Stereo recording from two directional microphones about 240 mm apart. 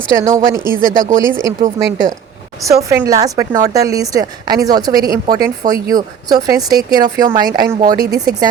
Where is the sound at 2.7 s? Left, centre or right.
Centre.